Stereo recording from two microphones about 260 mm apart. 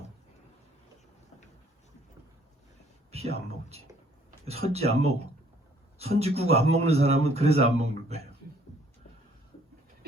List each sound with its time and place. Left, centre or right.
3.1 s speech: right